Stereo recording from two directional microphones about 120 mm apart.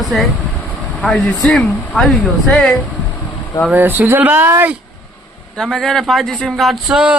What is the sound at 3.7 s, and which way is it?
Speech, 15° right (ahead or behind).